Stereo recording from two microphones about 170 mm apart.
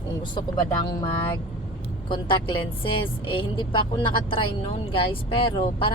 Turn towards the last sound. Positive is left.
turn(degrees=30)  # may be behind; listen again after turning